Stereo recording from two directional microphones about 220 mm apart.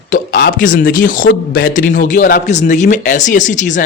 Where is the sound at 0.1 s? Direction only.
40° left (ahead or behind).